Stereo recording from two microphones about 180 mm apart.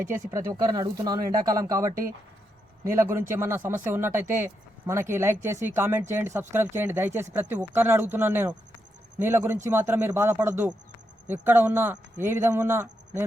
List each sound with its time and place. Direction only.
0.1 s speech: 15° right (ahead or behind)